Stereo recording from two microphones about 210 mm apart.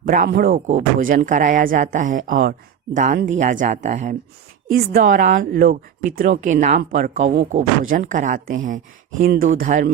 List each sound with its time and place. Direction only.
0.0 s a woman's voice: 40° right (ahead or behind)